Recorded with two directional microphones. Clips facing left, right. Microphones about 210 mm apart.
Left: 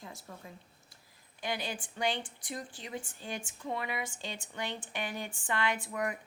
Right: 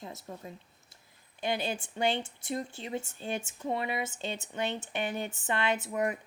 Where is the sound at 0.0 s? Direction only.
25° right (ahead or behind).